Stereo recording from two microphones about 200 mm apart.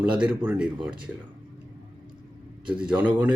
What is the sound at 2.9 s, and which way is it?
Speech, 5° right (ahead or behind).